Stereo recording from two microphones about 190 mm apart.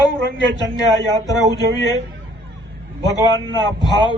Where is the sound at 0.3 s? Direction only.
75° right (ahead or behind).